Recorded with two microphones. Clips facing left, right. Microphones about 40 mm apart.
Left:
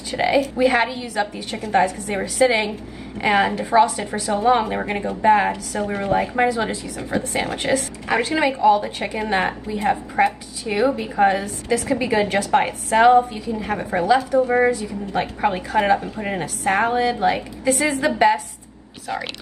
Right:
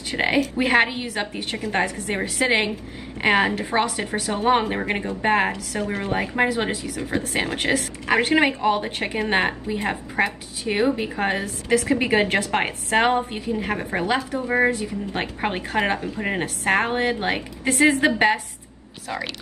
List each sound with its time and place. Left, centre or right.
0.1 s a woman's voice: right
3.5 s a woman's voice: right
7.5 s a woman's voice: right
9.5 s a woman's voice: right